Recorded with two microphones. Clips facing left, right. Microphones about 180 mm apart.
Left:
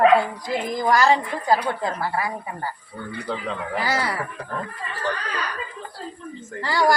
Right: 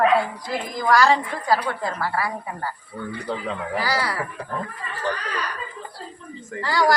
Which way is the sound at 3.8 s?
25° left (ahead or behind).